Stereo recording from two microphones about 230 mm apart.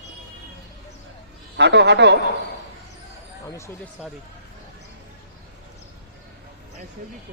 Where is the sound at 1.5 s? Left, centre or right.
Right.